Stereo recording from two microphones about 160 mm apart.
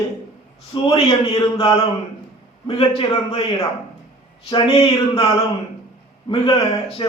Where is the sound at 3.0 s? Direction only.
30° left (ahead or behind).